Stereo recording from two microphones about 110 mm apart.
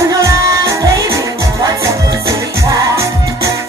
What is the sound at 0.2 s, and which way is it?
Music, 30° right (ahead or behind).